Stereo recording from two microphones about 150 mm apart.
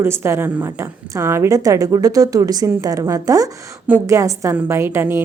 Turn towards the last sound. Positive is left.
turn(degrees=-15)  # may be behind; listen again after turning